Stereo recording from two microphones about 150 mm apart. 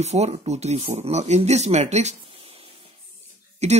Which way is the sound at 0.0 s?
45° right (ahead or behind).